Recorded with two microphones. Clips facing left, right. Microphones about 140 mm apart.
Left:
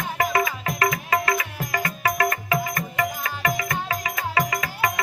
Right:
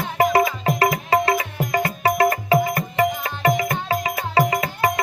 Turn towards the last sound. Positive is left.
turn(degrees=-30)  # may be behind; listen again after turning